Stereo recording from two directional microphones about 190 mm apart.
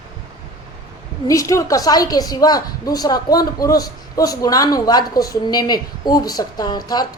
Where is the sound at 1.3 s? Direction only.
15° left (ahead or behind).